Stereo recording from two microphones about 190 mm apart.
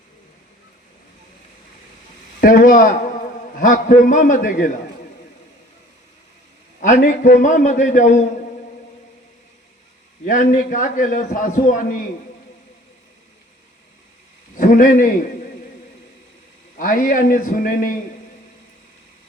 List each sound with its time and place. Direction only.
2.4 s a man's voice: 50° left (ahead or behind)
6.8 s a man's voice: 40° left (ahead or behind)
10.2 s a man's voice: 45° left (ahead or behind)
14.5 s a man's voice: 45° left (ahead or behind)
16.7 s a man's voice: 45° left (ahead or behind)